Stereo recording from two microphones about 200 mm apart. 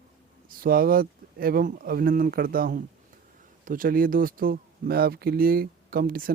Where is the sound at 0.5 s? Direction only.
45° right (ahead or behind).